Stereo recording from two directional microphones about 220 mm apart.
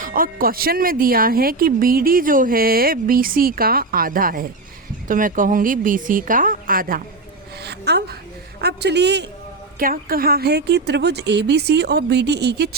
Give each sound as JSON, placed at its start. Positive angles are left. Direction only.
{"t": 0.0, "sound": "speech", "side_deg": -40}
{"t": 7.6, "sound": "a sound", "side_deg": -50}
{"t": 8.6, "sound": "a woman's voice", "side_deg": -50}
{"t": 9.7, "sound": "a woman's voice", "side_deg": -40}